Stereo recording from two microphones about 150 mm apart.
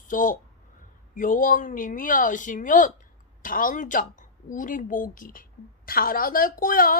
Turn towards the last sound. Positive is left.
turn(degrees=70)  # may be behind; listen again after turning